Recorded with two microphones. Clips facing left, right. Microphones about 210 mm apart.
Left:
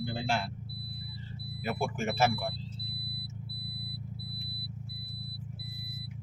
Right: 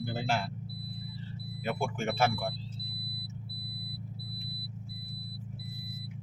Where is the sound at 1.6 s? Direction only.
5° left (ahead or behind).